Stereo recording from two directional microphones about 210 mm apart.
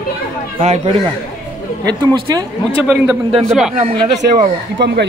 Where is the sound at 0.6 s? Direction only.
30° right (ahead or behind).